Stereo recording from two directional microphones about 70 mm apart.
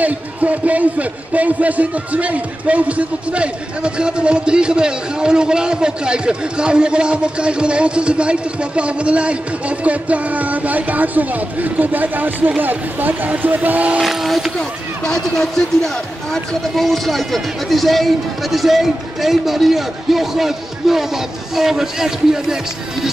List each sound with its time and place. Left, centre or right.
0.0 s a man's voice: right
14.0 s speech: centre